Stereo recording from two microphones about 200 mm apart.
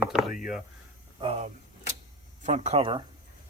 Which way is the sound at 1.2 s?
30° right (ahead or behind).